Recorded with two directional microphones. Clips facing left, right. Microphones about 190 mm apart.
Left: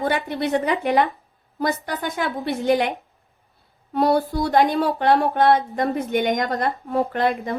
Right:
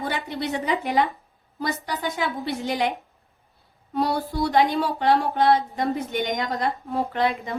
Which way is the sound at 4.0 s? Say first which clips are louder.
Left 5 dB; 50° left (ahead or behind).